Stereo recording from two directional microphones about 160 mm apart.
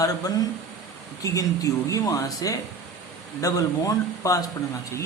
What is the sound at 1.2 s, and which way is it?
A man's voice, 20° left (ahead or behind).